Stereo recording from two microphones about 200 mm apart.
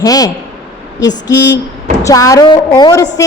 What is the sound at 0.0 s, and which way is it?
A woman's voice, 20° left (ahead or behind).